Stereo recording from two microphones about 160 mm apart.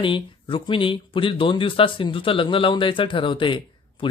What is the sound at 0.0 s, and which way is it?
Speech, 30° left (ahead or behind).